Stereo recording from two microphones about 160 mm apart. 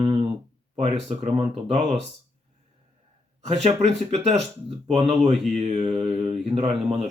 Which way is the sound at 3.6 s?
40° right (ahead or behind).